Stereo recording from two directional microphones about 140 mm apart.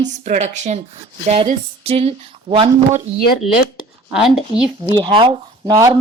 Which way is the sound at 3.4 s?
Centre (ahead or behind).